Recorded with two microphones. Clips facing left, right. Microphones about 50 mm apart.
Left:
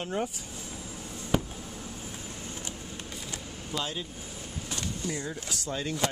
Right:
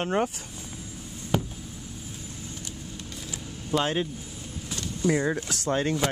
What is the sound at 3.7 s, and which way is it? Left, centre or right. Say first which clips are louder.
Speech: right 9 dB; right.